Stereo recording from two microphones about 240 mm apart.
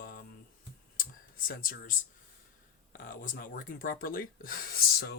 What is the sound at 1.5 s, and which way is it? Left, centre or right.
Speech, left.